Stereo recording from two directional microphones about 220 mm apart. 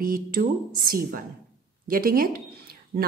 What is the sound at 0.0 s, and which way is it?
A woman's voice, 40° right (ahead or behind).